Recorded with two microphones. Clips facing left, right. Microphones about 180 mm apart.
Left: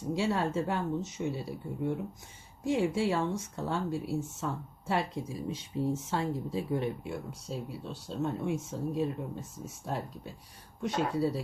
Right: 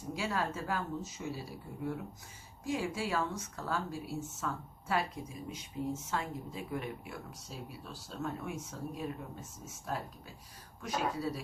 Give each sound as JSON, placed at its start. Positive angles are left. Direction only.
{"t": 0.1, "sound": "speech", "side_deg": 25}